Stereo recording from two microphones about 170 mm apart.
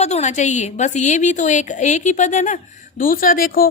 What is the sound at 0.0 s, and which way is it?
A woman's voice, 40° left (ahead or behind).